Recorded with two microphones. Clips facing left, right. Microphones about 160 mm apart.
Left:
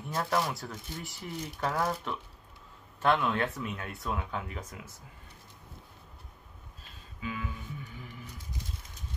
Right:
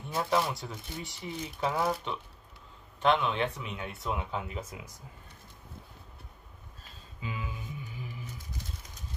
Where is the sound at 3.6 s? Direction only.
20° right (ahead or behind).